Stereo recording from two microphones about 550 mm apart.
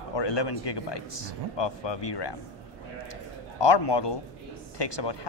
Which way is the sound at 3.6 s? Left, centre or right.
Left.